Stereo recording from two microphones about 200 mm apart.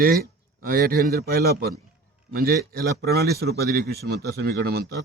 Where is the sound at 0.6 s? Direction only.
45° right (ahead or behind).